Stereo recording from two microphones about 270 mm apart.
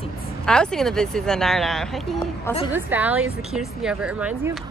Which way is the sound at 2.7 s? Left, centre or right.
Centre.